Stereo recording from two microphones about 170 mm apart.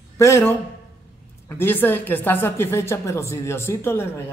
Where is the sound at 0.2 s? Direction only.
15° left (ahead or behind).